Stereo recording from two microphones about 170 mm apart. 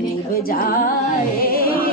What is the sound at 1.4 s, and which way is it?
Music, 60° left (ahead or behind).